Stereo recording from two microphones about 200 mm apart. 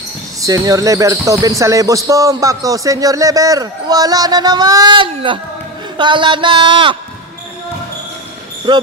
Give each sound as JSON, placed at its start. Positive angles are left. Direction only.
{"t": 0.4, "sound": "a man's voice", "side_deg": -15}
{"t": 8.7, "sound": "a man's voice", "side_deg": -20}